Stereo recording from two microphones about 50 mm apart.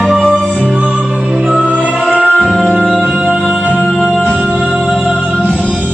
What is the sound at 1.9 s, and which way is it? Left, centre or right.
Music, centre.